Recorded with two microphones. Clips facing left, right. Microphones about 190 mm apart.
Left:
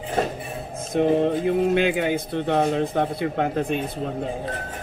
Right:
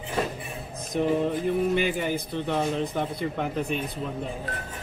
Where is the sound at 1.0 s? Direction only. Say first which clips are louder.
Left 5 dB; 60° left (ahead or behind).